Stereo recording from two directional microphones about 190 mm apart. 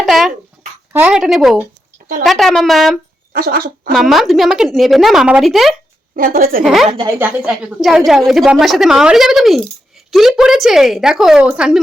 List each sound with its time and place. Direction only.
0.0 s dog: centre (ahead or behind)
0.9 s a woman's voice: 5° right (ahead or behind)
3.3 s speech: 50° right (ahead or behind)
3.9 s a woman's voice: centre (ahead or behind)
6.1 s speech: 50° right (ahead or behind)
6.8 s speech: 25° right (ahead or behind)
7.2 s a woman's voice: 10° right (ahead or behind)